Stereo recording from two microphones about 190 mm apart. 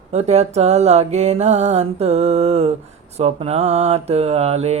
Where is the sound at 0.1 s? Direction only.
35° right (ahead or behind).